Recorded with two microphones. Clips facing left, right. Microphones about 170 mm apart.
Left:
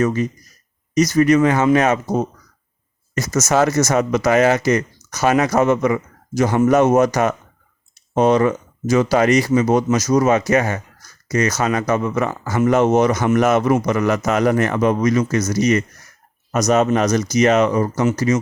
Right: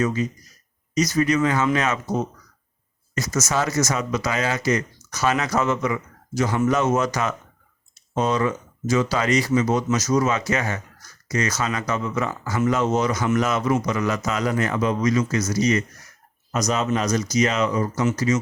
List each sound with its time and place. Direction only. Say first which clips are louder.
0.0 s speech: left 4 dB; 50° left (ahead or behind)
8.4 s speech: left 6 dB; 45° left (ahead or behind)
9.6 s speech: left 5 dB; 55° left (ahead or behind)
10.1 s speech: left 7 dB; 45° left (ahead or behind)